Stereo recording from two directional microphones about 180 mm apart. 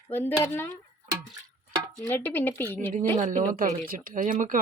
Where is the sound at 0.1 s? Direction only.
10° left (ahead or behind).